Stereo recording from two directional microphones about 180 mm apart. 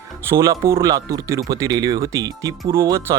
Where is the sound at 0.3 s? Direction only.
15° right (ahead or behind).